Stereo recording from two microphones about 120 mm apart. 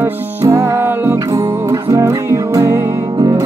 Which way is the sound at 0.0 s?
20° right (ahead or behind).